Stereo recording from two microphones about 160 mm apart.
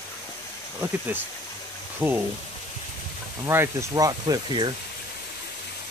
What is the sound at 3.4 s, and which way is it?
Speech, 15° right (ahead or behind).